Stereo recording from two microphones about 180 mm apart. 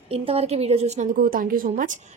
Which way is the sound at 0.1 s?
35° right (ahead or behind).